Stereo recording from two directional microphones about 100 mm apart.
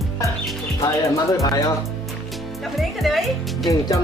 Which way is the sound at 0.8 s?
35° left (ahead or behind).